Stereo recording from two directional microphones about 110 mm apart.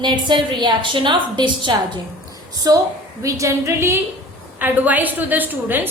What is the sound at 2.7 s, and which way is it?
A woman's voice, 35° right (ahead or behind).